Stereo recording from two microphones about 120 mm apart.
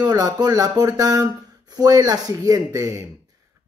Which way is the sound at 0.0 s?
35° right (ahead or behind).